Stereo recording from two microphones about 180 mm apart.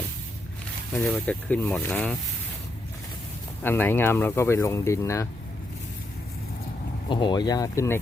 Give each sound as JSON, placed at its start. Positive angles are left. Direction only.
{"t": 0.9, "sound": "speech", "side_deg": 5}
{"t": 3.6, "sound": "speech", "side_deg": 10}
{"t": 7.1, "sound": "speech", "side_deg": 25}